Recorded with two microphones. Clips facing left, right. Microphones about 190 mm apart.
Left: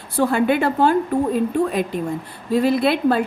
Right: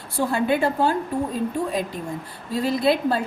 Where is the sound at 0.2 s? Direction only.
65° left (ahead or behind).